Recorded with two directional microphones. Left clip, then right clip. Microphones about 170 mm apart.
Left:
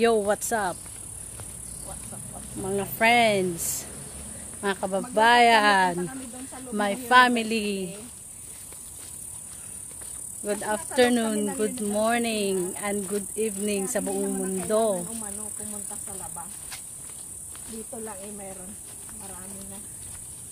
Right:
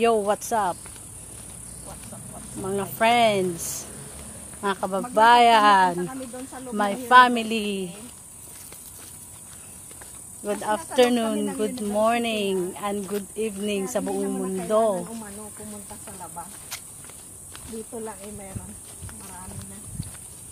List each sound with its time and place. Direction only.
0.0 s speech: 15° left (ahead or behind)
2.6 s speech: 10° left (ahead or behind)
10.4 s speech: 10° left (ahead or behind)
14.0 s speech: centre (ahead or behind)
14.3 s speech: 15° left (ahead or behind)